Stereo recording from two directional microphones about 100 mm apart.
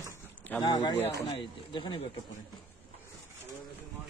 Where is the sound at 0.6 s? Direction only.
45° left (ahead or behind).